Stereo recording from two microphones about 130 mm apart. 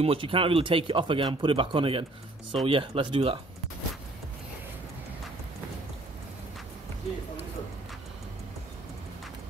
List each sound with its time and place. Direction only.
0.0 s speech: 45° right (ahead or behind)